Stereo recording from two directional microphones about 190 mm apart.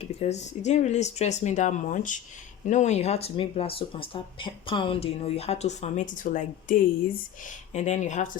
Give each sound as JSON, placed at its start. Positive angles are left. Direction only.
{"t": 0.0, "sound": "speech", "side_deg": 35}